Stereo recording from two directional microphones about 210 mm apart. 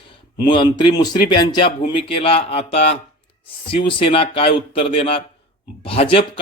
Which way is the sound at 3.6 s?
25° left (ahead or behind).